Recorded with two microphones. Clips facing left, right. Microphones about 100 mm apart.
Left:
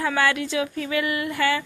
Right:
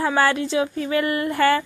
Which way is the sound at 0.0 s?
35° right (ahead or behind).